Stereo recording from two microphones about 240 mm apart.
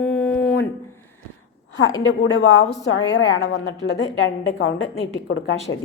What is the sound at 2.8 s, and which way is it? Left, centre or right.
A woman's voice, left.